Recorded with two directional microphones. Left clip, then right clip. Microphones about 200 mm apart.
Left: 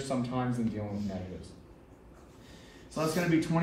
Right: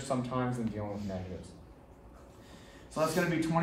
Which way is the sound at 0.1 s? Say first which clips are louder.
Right 1 dB; 15° right (ahead or behind).